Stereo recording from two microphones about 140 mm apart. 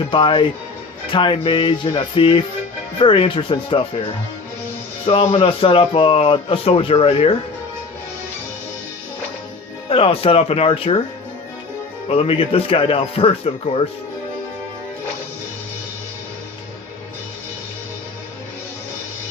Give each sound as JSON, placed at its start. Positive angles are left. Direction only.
{"t": 0.0, "sound": "speech", "side_deg": 35}
{"t": 5.0, "sound": "speech", "side_deg": 45}
{"t": 9.9, "sound": "speech", "side_deg": 45}
{"t": 12.0, "sound": "speech", "side_deg": 45}